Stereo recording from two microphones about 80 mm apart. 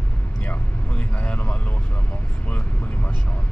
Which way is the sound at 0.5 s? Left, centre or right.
Centre.